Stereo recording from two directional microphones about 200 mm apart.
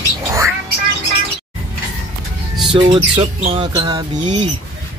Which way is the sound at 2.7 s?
25° right (ahead or behind).